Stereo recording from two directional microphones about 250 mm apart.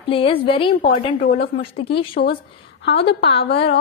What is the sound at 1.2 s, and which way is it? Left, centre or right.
Speech, left.